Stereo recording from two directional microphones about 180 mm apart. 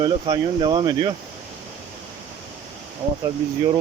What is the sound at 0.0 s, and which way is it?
Speech, 25° right (ahead or behind).